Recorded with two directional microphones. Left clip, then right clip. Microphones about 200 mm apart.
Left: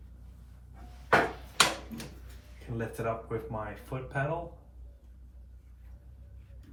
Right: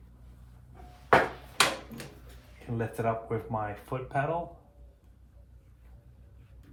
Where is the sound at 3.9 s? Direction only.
45° right (ahead or behind).